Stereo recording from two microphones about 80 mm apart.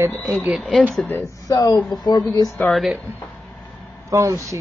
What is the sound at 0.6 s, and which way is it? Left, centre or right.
Speech, centre.